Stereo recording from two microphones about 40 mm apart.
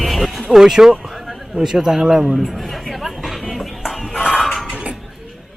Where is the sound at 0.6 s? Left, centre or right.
Centre.